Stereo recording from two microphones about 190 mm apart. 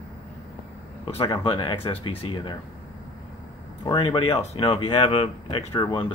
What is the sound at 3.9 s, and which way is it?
Speech, 25° left (ahead or behind).